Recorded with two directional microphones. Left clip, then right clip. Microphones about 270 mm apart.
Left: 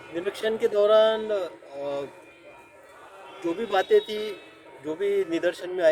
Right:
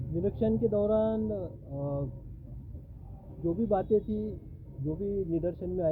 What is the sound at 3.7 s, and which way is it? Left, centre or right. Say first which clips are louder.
Speech: left 8 dB; centre.